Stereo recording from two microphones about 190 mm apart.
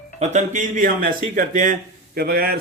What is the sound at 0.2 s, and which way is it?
A man's voice, 40° right (ahead or behind).